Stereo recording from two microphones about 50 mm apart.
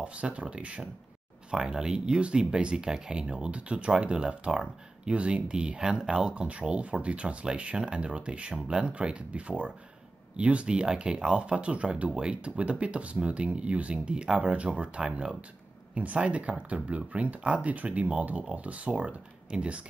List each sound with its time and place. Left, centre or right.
0.0 s speech: right
1.5 s speech: centre